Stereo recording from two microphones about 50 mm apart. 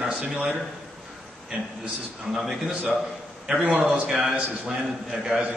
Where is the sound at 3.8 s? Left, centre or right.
Centre.